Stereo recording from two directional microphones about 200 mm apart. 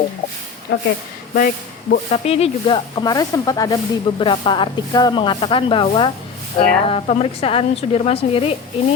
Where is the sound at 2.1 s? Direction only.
30° left (ahead or behind).